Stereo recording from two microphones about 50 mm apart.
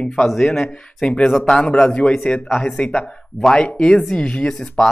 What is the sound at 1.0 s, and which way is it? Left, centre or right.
Speech, left.